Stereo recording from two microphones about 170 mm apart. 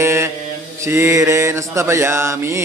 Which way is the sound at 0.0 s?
15° right (ahead or behind).